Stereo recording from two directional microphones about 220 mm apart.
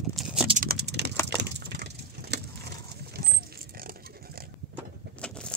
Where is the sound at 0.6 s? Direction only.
45° right (ahead or behind).